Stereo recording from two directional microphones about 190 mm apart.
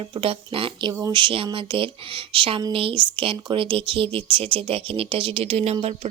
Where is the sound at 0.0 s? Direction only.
30° right (ahead or behind).